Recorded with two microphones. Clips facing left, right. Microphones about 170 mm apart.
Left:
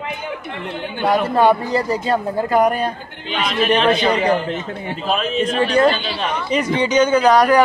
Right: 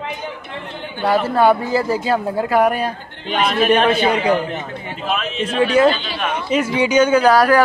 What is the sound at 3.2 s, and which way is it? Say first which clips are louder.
Speech: right 3 dB; 50° right (ahead or behind).